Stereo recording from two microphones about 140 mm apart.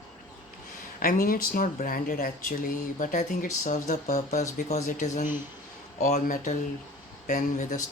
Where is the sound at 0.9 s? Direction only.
90° left.